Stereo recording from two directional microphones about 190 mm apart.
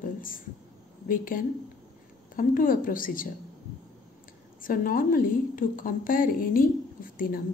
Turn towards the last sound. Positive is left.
turn(degrees=50)  # may be behind; listen again after turning